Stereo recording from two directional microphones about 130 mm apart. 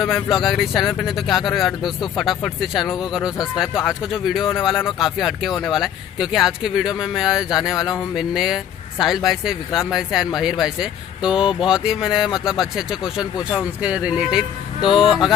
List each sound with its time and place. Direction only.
0.0 s speech: centre (ahead or behind)